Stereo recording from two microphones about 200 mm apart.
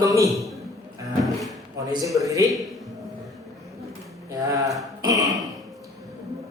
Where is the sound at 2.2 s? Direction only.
15° right (ahead or behind).